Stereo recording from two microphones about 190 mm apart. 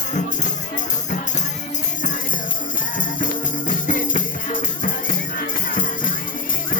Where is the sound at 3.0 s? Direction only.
45° left (ahead or behind).